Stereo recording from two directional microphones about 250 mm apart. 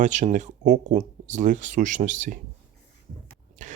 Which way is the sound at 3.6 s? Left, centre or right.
Right.